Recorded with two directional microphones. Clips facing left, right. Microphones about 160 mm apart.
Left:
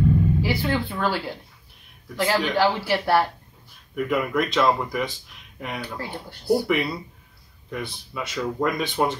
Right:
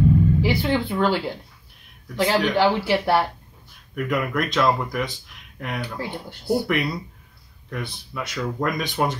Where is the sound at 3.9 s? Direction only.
5° left (ahead or behind).